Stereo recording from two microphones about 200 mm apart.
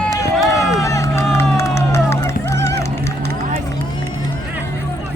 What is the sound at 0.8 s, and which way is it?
Music, 15° left (ahead or behind).